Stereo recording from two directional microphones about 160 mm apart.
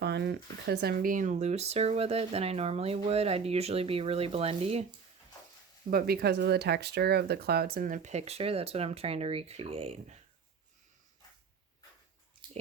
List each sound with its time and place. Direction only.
0.0 s speech: 90° right; by 4.9 s 40° right (ahead or behind)
5.9 s speech: 70° right (ahead or behind); by 10.2 s 40° right (ahead or behind)